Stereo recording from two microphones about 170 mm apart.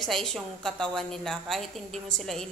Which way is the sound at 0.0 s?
Centre (ahead or behind).